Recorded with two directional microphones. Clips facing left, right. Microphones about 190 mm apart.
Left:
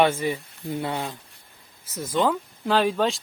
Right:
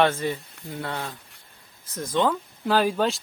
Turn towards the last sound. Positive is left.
turn(degrees=0)  # may be behind; listen again after turning